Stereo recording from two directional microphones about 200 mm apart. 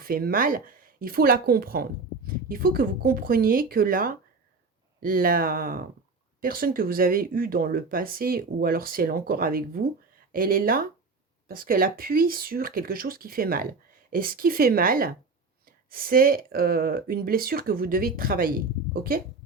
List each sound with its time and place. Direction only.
0.0 s speech: 45° right (ahead or behind)